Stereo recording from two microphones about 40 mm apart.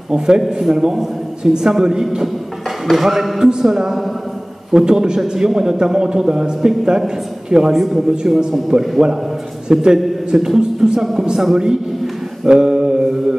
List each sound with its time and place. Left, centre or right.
0.6 s a man's voice: centre
7.7 s a man's voice: centre
12.4 s mantra: centre